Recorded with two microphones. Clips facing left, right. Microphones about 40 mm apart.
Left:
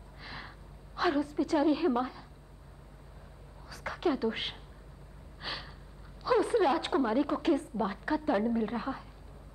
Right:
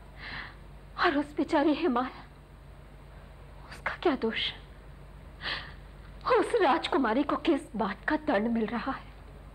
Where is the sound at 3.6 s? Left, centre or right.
Right.